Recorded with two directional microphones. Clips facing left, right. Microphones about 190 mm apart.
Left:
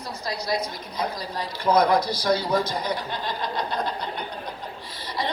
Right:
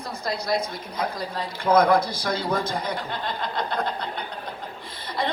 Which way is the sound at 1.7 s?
50° right (ahead or behind).